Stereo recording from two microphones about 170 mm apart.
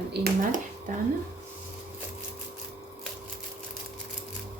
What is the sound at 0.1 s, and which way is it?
Speech, 75° right (ahead or behind).